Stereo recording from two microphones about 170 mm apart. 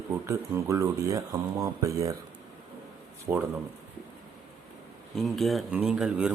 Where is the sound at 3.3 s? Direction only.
10° right (ahead or behind).